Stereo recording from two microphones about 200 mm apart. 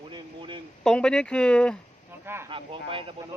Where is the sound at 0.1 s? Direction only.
25° right (ahead or behind).